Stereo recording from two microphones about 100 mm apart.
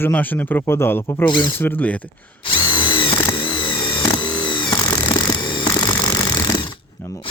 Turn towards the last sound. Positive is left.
turn(degrees=20)  # may be behind; listen again after turning